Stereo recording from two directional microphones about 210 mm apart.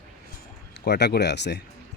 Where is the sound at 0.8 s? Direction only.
50° left (ahead or behind).